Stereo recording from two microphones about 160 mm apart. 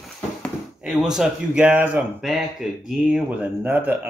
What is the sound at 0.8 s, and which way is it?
Speech, 5° right (ahead or behind).